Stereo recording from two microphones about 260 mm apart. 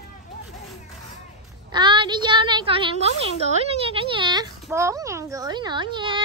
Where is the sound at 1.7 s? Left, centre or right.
Centre.